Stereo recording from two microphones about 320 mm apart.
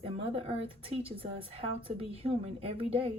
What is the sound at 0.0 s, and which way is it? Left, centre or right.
A woman's voice, centre.